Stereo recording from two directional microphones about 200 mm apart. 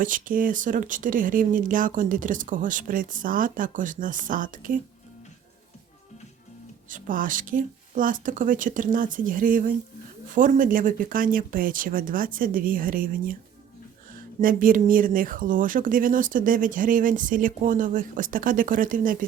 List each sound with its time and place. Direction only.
0.0 s speech: 40° right (ahead or behind)
6.8 s speech: 40° right (ahead or behind)